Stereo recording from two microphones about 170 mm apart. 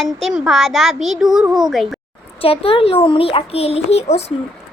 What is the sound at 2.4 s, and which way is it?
A child's voice, 35° left (ahead or behind).